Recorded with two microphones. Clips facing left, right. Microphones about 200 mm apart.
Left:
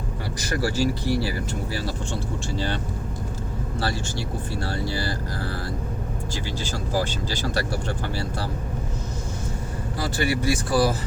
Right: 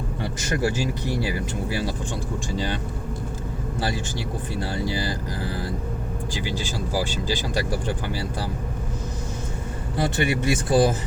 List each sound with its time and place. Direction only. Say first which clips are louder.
0.3 s speech: even; 20° right (ahead or behind)
3.8 s speech: even; 15° right (ahead or behind)
10.0 s speech: right 2 dB; 20° right (ahead or behind)